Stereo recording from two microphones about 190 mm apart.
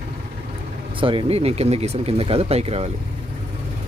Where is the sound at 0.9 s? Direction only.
25° right (ahead or behind).